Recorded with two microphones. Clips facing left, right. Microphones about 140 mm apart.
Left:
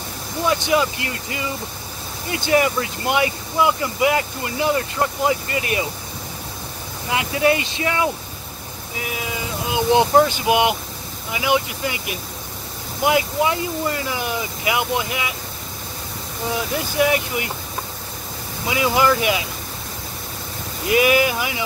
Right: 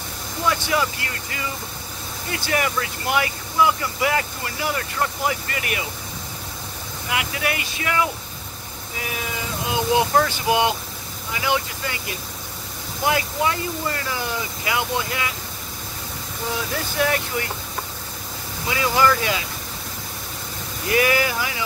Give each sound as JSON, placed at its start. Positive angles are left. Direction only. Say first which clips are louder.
{"t": 0.5, "sound": "speech", "louder": "left 3 dB", "side_deg": 20}
{"t": 7.1, "sound": "speech", "louder": "left 7 dB", "side_deg": 25}
{"t": 9.9, "sound": "speech", "louder": "left 5 dB", "side_deg": 20}
{"t": 16.7, "sound": "speech", "louder": "left 4 dB", "side_deg": 15}
{"t": 18.7, "sound": "speech", "louder": "left 2 dB", "side_deg": 15}
{"t": 20.8, "sound": "speech", "louder": "left 3 dB", "side_deg": 20}